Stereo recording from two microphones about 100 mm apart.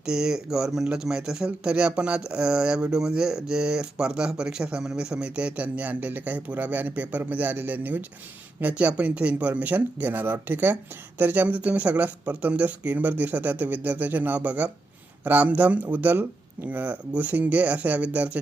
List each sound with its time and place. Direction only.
0.0 s speech: 5° right (ahead or behind)